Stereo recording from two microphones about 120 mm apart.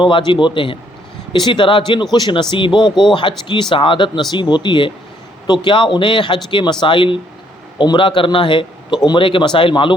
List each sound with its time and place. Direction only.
0.0 s a man's voice: 40° left (ahead or behind)